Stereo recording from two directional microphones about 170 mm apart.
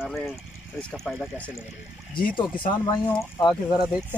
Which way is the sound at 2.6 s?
30° left (ahead or behind).